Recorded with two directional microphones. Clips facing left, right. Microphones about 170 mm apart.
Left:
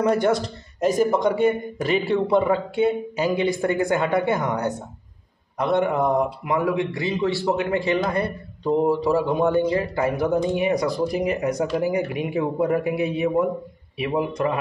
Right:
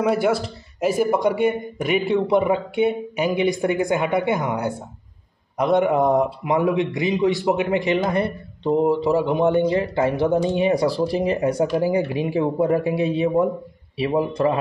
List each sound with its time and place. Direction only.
0.0 s a man's voice: 5° right (ahead or behind); by 14.6 s 30° right (ahead or behind)